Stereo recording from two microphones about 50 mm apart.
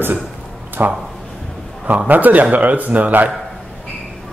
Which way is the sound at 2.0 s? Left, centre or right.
Right.